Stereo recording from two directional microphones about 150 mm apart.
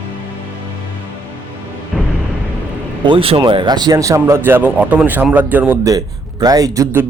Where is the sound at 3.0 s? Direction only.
35° right (ahead or behind); by 5.7 s 10° right (ahead or behind).